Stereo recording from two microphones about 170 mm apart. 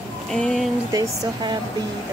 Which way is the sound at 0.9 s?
20° right (ahead or behind).